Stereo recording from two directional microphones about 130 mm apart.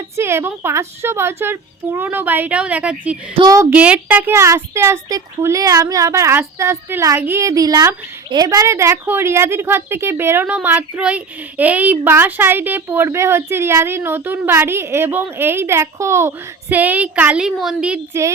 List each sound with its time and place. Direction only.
0.2 s a woman's voice: 20° right (ahead or behind)